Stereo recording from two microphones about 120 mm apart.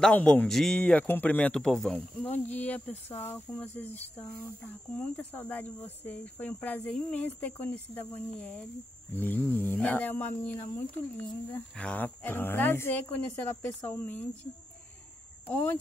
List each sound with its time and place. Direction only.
0.0 s speech: 10° left (ahead or behind)
2.2 s speech: 15° left (ahead or behind)
11.7 s speech: 10° left (ahead or behind)
15.5 s speech: 15° left (ahead or behind)